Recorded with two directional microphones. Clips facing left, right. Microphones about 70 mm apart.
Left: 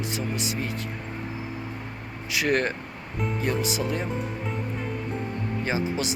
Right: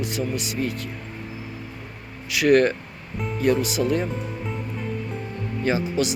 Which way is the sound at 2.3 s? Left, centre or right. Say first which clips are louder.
Right 7 dB; left.